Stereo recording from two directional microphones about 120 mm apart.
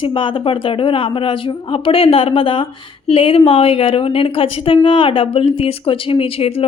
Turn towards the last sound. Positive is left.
turn(degrees=55)  # may be behind; listen again after turning